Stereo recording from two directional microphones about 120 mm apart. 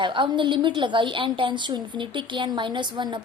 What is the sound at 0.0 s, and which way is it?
A woman's voice, 45° right (ahead or behind).